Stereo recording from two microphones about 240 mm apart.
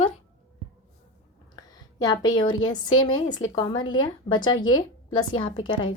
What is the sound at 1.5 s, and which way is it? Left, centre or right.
A woman's voice, centre.